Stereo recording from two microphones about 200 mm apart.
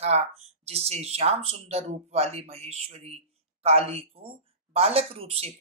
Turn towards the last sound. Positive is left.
turn(degrees=-30)  # may be behind; listen again after turning